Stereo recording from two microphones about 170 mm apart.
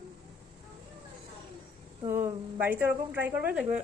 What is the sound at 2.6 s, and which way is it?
Speech, 10° right (ahead or behind).